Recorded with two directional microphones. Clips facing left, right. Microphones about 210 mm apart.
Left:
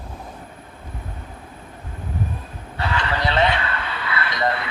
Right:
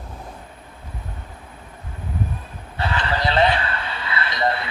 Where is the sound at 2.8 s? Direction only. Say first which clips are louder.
Even; 35° right (ahead or behind).